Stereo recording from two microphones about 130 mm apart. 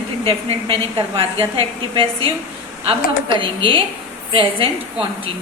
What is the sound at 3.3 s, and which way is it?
A woman's voice, 40° right (ahead or behind).